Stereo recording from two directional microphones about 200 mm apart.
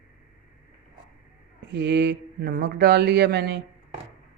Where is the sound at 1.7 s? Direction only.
55° right (ahead or behind).